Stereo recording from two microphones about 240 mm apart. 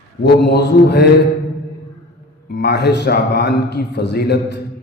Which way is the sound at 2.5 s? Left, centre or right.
Left.